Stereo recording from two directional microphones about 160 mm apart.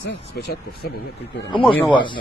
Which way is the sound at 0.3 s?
85° left.